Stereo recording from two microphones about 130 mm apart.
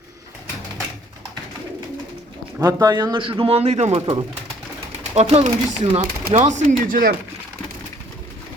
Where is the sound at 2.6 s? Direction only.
30° right (ahead or behind); by 4.2 s 45° right (ahead or behind).